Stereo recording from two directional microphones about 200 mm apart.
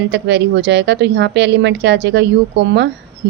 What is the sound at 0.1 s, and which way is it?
Speech, 60° right (ahead or behind).